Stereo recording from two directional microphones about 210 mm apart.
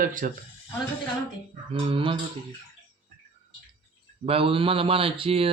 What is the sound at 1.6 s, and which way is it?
Speech, 25° right (ahead or behind).